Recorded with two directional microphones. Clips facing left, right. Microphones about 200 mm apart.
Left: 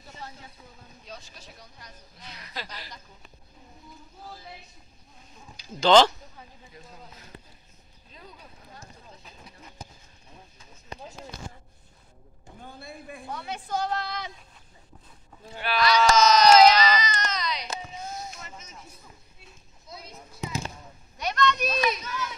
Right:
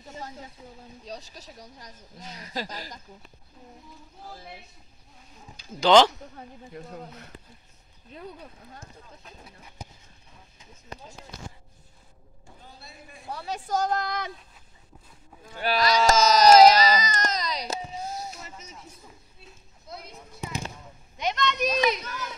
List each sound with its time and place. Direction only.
0.1 s a sound: 40° right (ahead or behind)
1.0 s speech: 40° right (ahead or behind)
5.8 s speech: 10° right (ahead or behind)
6.7 s speech: 60° right (ahead or behind)
12.6 s a man's voice: 55° left (ahead or behind)
13.3 s a woman's voice: 35° right (ahead or behind)
15.6 s baby cry: 40° right (ahead or behind)
19.9 s a sound: 60° right (ahead or behind)
21.2 s a child's voice: 20° right (ahead or behind)